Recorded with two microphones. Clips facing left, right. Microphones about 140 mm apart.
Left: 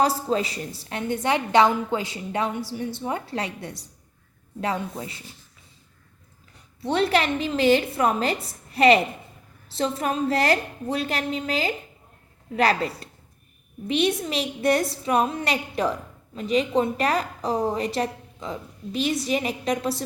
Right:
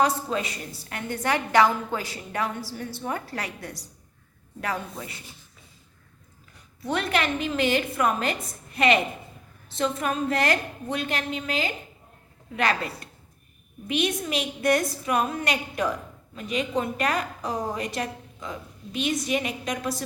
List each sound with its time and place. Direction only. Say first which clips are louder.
0.0 s a woman's voice: left 2 dB; 30° left (ahead or behind)
6.8 s a woman's voice: left 4 dB; 30° left (ahead or behind)